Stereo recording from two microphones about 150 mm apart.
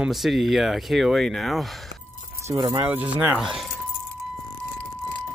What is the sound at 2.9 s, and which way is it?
Speech, 10° right (ahead or behind).